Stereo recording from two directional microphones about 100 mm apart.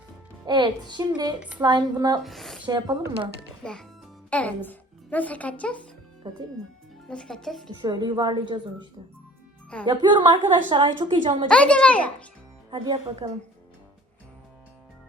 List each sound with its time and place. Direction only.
0.4 s speech: 50° right (ahead or behind)
1.4 s a woman's voice: 15° right (ahead or behind)
1.6 s a woman's voice: 45° right (ahead or behind)
2.2 s speech: centre (ahead or behind)
2.6 s a woman's voice: 45° right (ahead or behind)
3.6 s a child's voice: 10° left (ahead or behind)
6.3 s a woman's voice: 45° right (ahead or behind)
7.1 s speech: 10° left (ahead or behind)
7.8 s a woman's voice: 45° right (ahead or behind)
9.8 s a woman's voice: 50° right (ahead or behind)
11.4 s a child's voice: 10° left (ahead or behind)
12.7 s a woman's voice: 45° right (ahead or behind)